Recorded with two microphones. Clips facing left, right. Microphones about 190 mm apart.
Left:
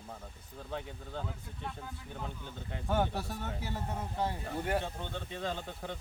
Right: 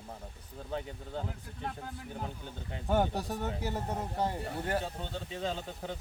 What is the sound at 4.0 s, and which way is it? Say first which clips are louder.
Speech: even; 15° right (ahead or behind).